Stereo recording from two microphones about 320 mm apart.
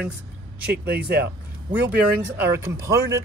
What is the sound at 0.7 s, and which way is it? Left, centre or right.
Speech, right.